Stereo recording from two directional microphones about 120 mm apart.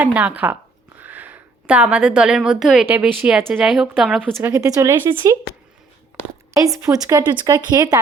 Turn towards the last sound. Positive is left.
turn(degrees=-35)  # may be behind; listen again after turning